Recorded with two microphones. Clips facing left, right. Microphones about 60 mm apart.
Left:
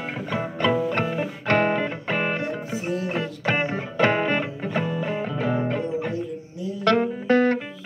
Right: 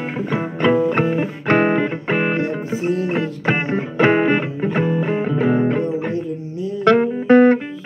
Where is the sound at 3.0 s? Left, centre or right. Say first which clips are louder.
Right 5 dB; right.